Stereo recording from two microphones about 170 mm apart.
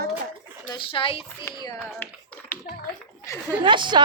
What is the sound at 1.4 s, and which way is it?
Music, 15° left (ahead or behind).